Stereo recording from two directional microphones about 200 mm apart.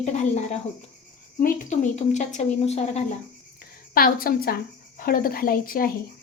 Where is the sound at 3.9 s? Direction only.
45° left (ahead or behind).